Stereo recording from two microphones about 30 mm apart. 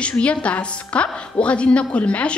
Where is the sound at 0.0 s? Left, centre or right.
Left.